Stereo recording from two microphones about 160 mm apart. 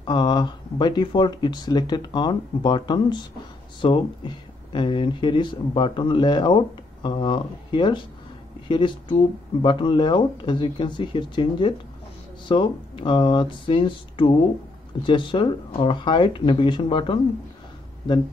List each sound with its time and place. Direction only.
0.0 s speech: 30° left (ahead or behind)